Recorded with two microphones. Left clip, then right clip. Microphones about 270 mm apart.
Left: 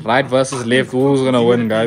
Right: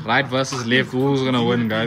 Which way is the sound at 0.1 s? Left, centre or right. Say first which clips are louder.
Left 5 dB; centre.